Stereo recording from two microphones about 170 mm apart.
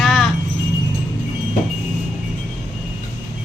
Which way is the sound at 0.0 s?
Centre (ahead or behind).